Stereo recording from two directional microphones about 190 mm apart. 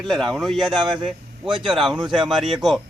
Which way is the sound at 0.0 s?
Centre (ahead or behind).